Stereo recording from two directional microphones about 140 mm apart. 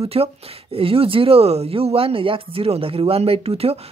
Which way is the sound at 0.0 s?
45° right (ahead or behind).